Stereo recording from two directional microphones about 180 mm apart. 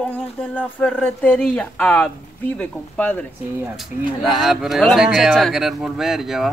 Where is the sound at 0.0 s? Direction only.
10° left (ahead or behind).